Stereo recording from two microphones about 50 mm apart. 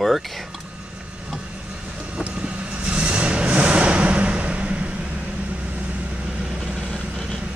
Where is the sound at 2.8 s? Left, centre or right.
Right.